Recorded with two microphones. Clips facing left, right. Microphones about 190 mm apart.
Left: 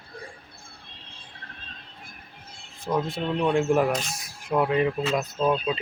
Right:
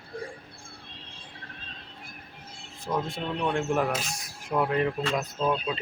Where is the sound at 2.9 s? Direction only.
20° left (ahead or behind).